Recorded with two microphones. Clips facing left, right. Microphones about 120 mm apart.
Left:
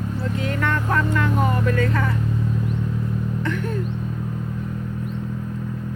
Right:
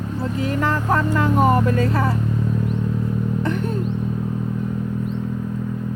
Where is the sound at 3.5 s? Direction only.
20° right (ahead or behind).